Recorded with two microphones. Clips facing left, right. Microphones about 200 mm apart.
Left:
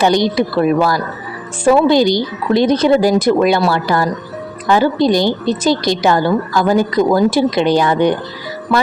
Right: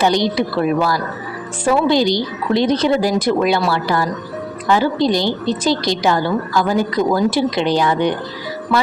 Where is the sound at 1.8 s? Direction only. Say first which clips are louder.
Left 3 dB; 50° left (ahead or behind).